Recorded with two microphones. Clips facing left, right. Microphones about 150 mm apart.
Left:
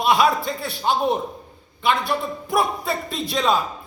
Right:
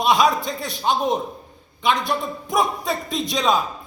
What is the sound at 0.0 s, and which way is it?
A man's voice, 20° right (ahead or behind).